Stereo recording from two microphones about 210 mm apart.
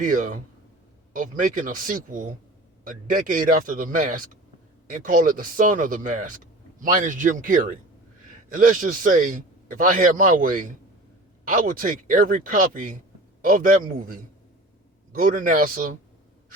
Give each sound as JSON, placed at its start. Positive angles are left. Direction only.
{"t": 0.0, "sound": "speech", "side_deg": -40}
{"t": 15.2, "sound": "speech", "side_deg": -40}